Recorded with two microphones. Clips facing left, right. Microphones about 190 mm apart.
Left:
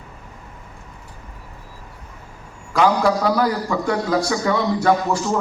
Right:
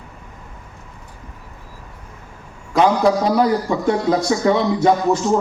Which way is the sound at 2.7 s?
20° right (ahead or behind).